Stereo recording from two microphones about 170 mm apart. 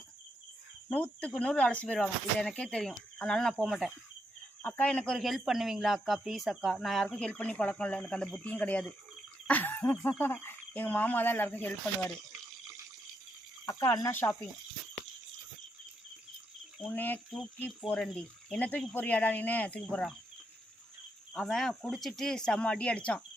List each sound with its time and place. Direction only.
1.2 s speech: 5° left (ahead or behind)
13.7 s speech: 20° left (ahead or behind)
16.9 s speech: 10° left (ahead or behind)
17.3 s speech: centre (ahead or behind)
21.3 s speech: centre (ahead or behind)